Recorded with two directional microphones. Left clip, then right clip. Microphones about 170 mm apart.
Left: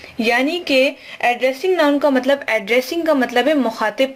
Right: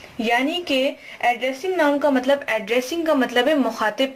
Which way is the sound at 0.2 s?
35° left (ahead or behind).